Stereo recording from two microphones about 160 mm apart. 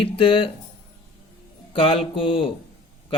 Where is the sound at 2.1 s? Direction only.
35° left (ahead or behind).